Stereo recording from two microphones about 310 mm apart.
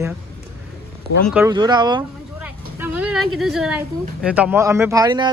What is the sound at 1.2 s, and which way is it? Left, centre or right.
Speech, centre.